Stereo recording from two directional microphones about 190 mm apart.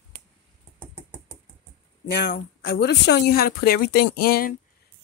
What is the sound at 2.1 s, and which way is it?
Speech, 65° left (ahead or behind).